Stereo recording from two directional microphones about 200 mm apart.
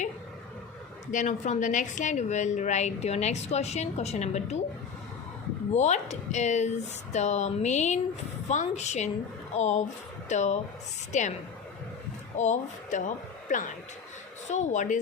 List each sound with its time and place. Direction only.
1.1 s a woman's voice: 35° left (ahead or behind)
5.7 s a woman's voice: 35° left (ahead or behind)
12.4 s a woman's voice: 35° left (ahead or behind)